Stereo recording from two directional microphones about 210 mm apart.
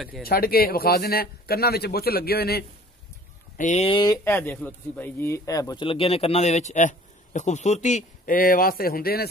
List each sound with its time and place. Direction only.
0.2 s a man's voice: 45° left (ahead or behind)
3.5 s speech: 35° left (ahead or behind)